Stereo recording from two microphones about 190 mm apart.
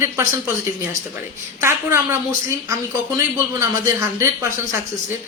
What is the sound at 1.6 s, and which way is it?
Speech, 15° right (ahead or behind).